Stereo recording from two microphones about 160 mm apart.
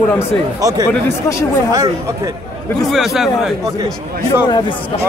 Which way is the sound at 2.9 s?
Centre (ahead or behind).